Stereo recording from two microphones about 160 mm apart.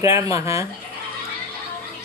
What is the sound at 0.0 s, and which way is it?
Speech, 20° right (ahead or behind).